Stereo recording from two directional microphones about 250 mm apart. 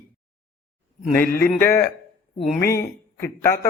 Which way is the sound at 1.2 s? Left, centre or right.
Left.